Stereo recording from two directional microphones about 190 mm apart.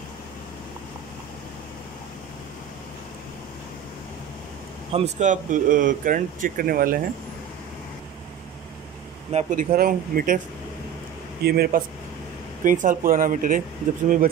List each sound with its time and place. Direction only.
4.9 s speech: 35° right (ahead or behind)
9.3 s speech: 40° right (ahead or behind)
11.4 s speech: 55° right (ahead or behind)